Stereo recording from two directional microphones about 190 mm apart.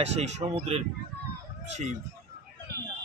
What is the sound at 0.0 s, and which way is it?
Speech, 35° right (ahead or behind).